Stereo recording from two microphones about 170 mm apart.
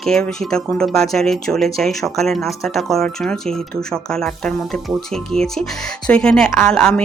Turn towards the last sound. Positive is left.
turn(degrees=5)  # may be behind; listen again after turning